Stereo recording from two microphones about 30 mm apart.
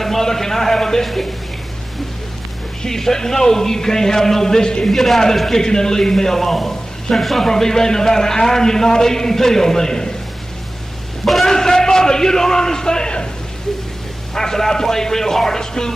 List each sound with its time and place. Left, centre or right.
0.0 s a sound: centre
1.0 s a man's voice: centre
2.8 s a man's voice: centre
4.9 s a man's voice: centre
5.6 s a man's voice: left
11.2 s a sound: centre
11.5 s a man's voice: centre
14.3 s a man's voice: centre